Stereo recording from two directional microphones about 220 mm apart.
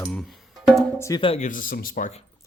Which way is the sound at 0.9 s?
15° left (ahead or behind).